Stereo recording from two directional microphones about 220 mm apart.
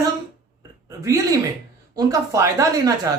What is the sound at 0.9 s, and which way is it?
Speech, 15° right (ahead or behind).